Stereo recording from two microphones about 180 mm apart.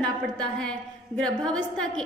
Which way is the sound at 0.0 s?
5° left (ahead or behind).